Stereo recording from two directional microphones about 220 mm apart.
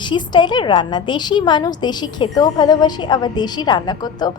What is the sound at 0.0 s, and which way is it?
A woman's voice, 20° left (ahead or behind).